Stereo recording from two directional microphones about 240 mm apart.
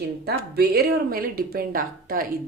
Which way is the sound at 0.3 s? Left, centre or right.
Right.